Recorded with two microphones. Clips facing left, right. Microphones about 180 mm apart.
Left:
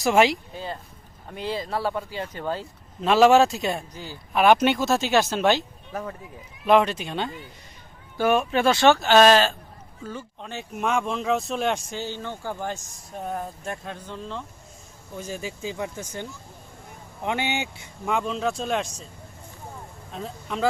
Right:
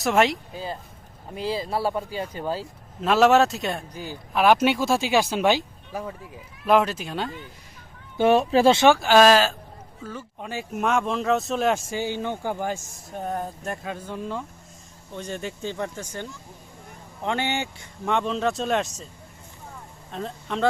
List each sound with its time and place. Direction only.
0.0 s speech: centre (ahead or behind)
3.9 s speech: 15° right (ahead or behind)
8.2 s speech: 30° right (ahead or behind)
8.9 s speech: 10° right (ahead or behind)
13.1 s speech: centre (ahead or behind)
15.1 s speech: 5° left (ahead or behind)
17.2 s speech: 15° left (ahead or behind)
18.0 s speech: centre (ahead or behind)
20.1 s speech: centre (ahead or behind)